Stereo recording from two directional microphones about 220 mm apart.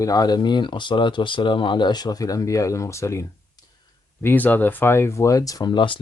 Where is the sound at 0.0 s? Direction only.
15° left (ahead or behind).